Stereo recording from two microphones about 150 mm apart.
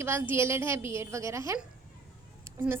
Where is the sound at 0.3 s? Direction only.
15° right (ahead or behind).